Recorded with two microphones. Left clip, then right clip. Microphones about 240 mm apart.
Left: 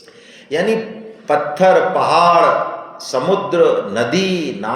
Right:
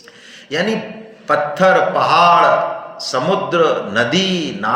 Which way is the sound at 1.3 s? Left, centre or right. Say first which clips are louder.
Even; right.